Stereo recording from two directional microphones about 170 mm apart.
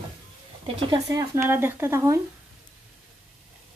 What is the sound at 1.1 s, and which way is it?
Speech, 15° right (ahead or behind).